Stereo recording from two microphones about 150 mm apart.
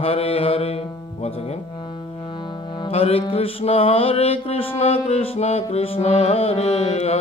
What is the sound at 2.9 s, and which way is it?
Mantra, 40° left (ahead or behind).